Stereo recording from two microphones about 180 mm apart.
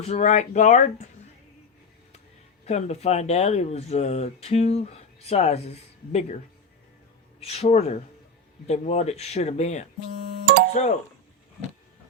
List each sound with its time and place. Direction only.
0.0 s speech: 40° left (ahead or behind)
2.6 s speech: 40° left (ahead or behind)
7.3 s speech: 35° left (ahead or behind)